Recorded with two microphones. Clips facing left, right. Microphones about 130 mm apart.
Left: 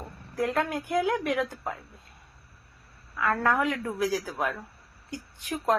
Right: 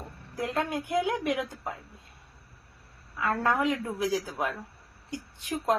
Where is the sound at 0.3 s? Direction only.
20° right (ahead or behind).